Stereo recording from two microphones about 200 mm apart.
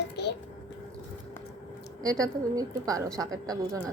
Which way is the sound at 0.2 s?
55° left (ahead or behind).